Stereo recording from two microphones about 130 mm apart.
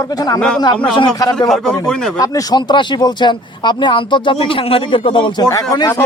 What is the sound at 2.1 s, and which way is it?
Speech, 25° left (ahead or behind).